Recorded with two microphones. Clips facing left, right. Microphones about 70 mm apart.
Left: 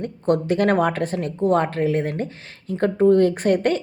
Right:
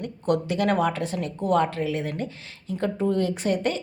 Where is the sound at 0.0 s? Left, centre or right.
Left.